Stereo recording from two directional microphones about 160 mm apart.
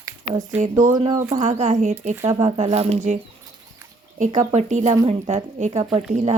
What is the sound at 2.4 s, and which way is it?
Speech, 40° right (ahead or behind).